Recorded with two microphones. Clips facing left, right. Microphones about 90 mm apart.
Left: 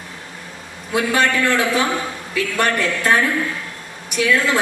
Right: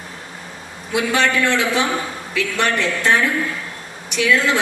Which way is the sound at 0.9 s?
40° left (ahead or behind).